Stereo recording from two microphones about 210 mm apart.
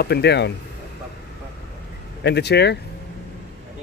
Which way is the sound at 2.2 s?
55° left (ahead or behind).